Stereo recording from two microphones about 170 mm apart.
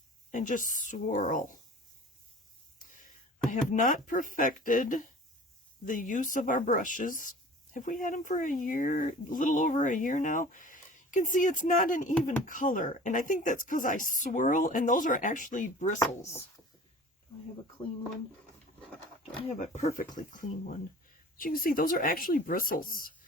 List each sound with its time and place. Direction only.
0.3 s speech: 50° left (ahead or behind)
2.7 s a sound: 50° left (ahead or behind)
3.5 s speech: 50° left (ahead or behind)
19.5 s speech: 45° left (ahead or behind)